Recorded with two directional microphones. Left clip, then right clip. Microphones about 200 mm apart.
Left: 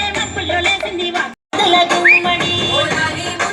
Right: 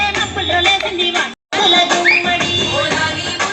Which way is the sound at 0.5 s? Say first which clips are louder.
Right 3 dB; 50° left (ahead or behind).